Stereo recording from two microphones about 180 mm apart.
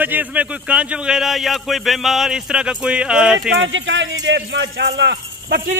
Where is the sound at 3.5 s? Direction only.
90° right; by 5.6 s 70° right (ahead or behind).